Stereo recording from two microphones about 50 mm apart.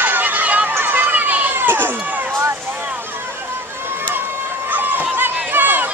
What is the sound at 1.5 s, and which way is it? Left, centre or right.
Run, right.